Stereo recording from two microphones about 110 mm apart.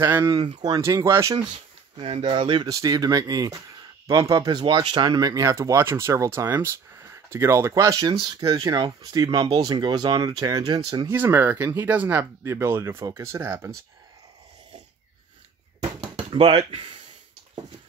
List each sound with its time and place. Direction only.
0.2 s speech: 40° right (ahead or behind)
2.0 s speech: 50° right (ahead or behind)
2.7 s speech: 35° right (ahead or behind)
4.6 s speech: 50° right (ahead or behind)
11.1 s speech: 20° right (ahead or behind)
16.0 s a sound: 55° right (ahead or behind)